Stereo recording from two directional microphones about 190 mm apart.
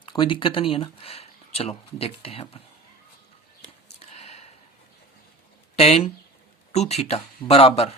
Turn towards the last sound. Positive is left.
turn(degrees=30)  # may be behind; listen again after turning